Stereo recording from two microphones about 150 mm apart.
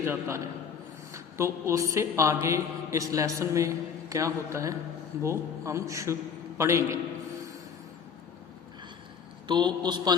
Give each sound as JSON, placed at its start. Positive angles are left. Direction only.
{"t": 0.0, "sound": "a man's voice", "side_deg": -15}
{"t": 9.5, "sound": "a woman's voice", "side_deg": -30}